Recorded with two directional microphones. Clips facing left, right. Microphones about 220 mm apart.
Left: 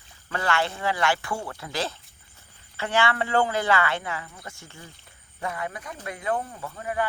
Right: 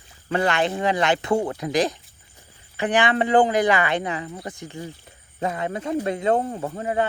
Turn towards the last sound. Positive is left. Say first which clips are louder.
# right 6 dB
turn(degrees=-25)  # may be behind; listen again after turning